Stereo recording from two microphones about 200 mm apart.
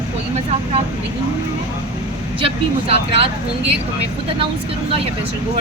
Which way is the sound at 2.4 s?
25° right (ahead or behind).